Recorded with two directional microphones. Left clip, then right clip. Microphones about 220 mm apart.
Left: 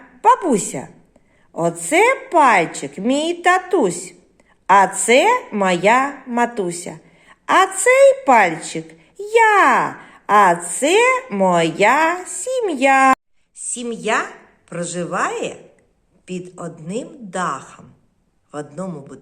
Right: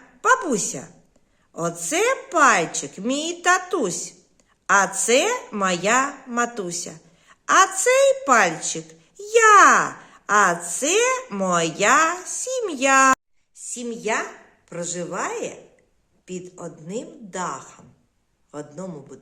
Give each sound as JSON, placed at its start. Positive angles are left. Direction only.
{"t": 0.2, "sound": "a woman's voice", "side_deg": -10}